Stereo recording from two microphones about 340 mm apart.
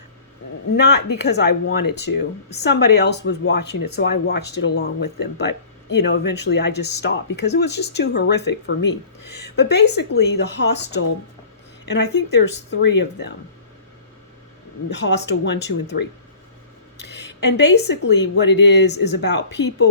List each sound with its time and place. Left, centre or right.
0.8 s speech: left
14.8 s speech: left